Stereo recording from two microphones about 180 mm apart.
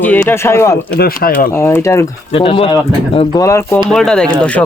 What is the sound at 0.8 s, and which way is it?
Speech, 60° left (ahead or behind).